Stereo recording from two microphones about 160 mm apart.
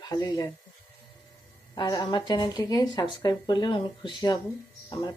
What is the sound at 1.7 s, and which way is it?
Speech, 25° left (ahead or behind).